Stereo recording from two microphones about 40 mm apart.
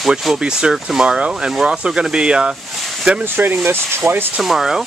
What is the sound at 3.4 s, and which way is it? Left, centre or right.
Speech, right.